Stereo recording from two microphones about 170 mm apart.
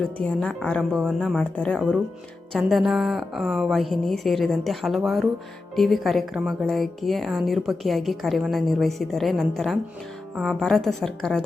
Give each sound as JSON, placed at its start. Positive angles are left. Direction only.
{"t": 0.0, "sound": "speech", "side_deg": 5}